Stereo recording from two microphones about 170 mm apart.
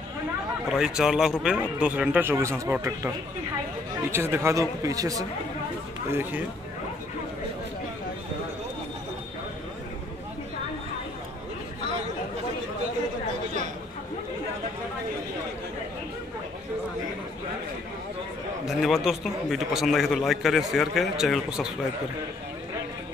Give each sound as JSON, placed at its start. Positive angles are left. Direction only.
{"t": 0.7, "sound": "a man's voice", "side_deg": -5}
{"t": 4.1, "sound": "speech", "side_deg": -15}
{"t": 18.7, "sound": "a man's voice", "side_deg": 0}